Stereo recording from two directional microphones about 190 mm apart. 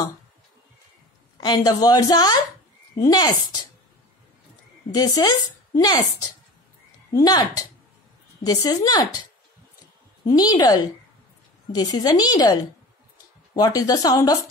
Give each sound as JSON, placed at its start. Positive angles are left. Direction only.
{"t": 1.4, "sound": "speech", "side_deg": 20}
{"t": 4.9, "sound": "speech", "side_deg": 20}
{"t": 7.2, "sound": "speech", "side_deg": 20}
{"t": 10.2, "sound": "speech", "side_deg": 20}
{"t": 13.6, "sound": "speech", "side_deg": 20}